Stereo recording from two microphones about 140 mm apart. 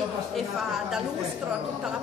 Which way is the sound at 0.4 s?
Centre (ahead or behind).